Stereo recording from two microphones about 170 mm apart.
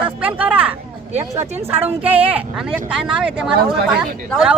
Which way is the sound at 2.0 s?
35° right (ahead or behind).